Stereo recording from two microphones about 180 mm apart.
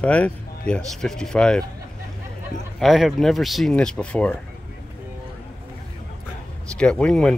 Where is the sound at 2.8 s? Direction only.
Centre (ahead or behind).